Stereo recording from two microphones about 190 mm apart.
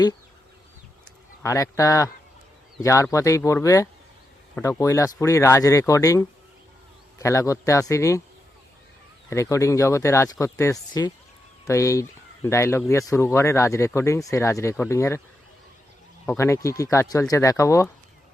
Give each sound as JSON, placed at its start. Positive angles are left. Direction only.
{"t": 1.4, "sound": "speech", "side_deg": 15}
{"t": 9.3, "sound": "speech", "side_deg": 15}
{"t": 16.2, "sound": "speech", "side_deg": 10}